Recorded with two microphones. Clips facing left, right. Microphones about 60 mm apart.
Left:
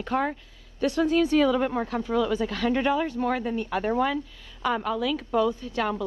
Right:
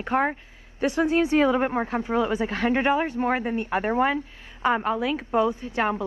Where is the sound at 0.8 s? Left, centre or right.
Right.